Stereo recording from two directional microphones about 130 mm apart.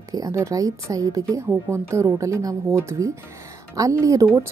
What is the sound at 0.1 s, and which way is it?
A woman's voice, 25° right (ahead or behind).